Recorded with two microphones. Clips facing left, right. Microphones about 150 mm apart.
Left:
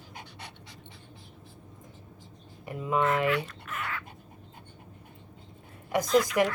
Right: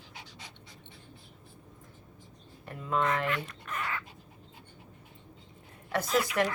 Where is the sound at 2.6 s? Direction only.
10° left (ahead or behind).